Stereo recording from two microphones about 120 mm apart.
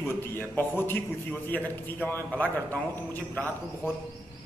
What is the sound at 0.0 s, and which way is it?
A man's voice, 20° left (ahead or behind).